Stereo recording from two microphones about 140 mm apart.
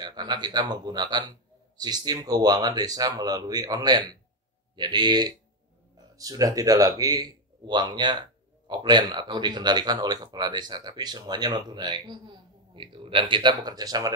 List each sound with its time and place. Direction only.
0.0 s speech: 30° right (ahead or behind)